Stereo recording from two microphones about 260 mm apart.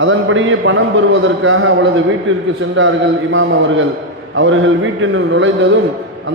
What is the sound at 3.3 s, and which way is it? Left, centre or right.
A man's voice, right.